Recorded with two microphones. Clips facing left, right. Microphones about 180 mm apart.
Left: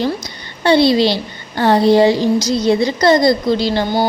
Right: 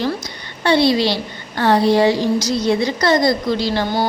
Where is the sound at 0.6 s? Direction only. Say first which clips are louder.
Left 3 dB; 30° left (ahead or behind).